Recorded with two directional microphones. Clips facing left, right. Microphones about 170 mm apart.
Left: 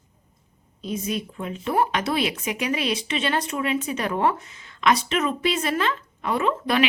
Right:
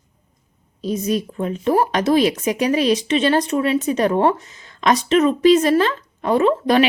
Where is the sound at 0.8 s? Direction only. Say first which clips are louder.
Right 7 dB; 40° right (ahead or behind).